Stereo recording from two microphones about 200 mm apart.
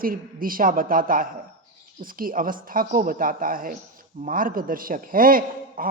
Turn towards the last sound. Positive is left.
turn(degrees=-45)  # may be behind; listen again after turning